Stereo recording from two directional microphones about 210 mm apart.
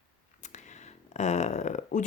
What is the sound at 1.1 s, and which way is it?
Speech, 35° left (ahead or behind).